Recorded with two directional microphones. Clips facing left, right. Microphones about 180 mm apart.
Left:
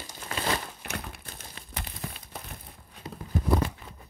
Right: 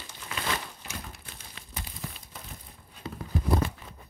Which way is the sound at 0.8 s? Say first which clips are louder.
Left 4 dB; 60° left (ahead or behind).